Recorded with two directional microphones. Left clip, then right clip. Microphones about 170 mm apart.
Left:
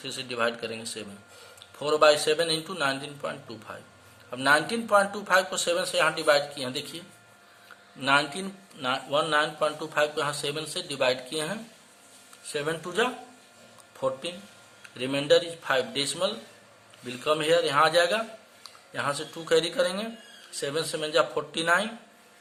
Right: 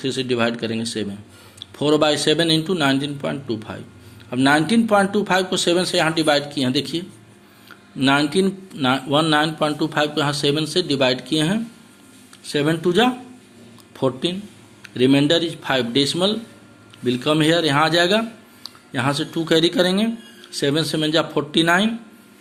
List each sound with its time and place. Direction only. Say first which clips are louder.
0.0 s a man's voice: right 8 dB; 20° right (ahead or behind)